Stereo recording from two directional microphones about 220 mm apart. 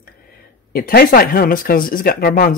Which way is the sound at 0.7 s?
45° left (ahead or behind).